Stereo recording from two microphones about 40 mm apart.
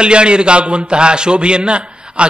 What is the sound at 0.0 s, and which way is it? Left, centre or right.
A man's voice, right.